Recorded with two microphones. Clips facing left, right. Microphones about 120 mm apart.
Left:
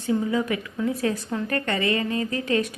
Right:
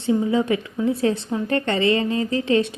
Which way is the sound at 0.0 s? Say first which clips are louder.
Right 4 dB; 25° right (ahead or behind).